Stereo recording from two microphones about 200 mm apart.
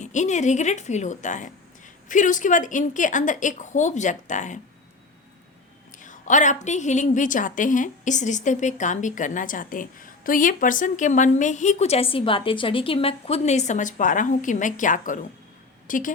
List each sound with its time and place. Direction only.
0.0 s a woman's voice: 35° left (ahead or behind)
6.0 s a woman's voice: 40° left (ahead or behind)